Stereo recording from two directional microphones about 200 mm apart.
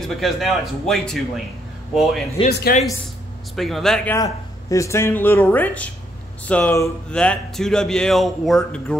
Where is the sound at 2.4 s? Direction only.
50° left (ahead or behind).